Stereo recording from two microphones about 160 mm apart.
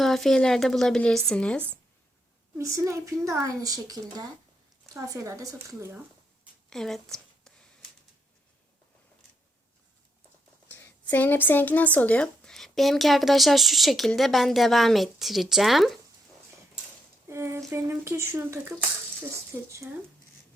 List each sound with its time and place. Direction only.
0.0 s speech: centre (ahead or behind)
2.6 s a woman's voice: 20° right (ahead or behind)
6.7 s a sound: 5° left (ahead or behind)
10.7 s speech: 10° left (ahead or behind)
17.2 s speech: 15° right (ahead or behind)